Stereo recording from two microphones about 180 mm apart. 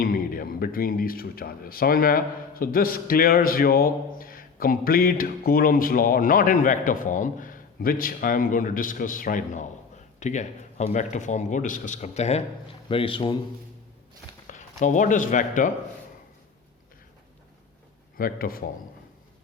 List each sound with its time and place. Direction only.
0.0 s a man's voice: 55° left (ahead or behind); by 13.3 s 30° left (ahead or behind)
14.4 s speech: 45° left (ahead or behind)
18.2 s speech: 55° left (ahead or behind)